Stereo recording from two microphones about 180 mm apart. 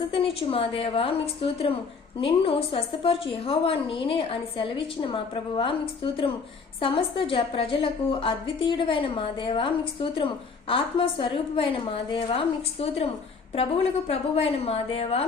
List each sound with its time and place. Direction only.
0.1 s a woman's voice: 30° left (ahead or behind)